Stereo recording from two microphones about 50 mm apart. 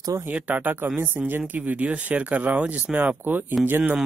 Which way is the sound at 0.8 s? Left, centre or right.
Right.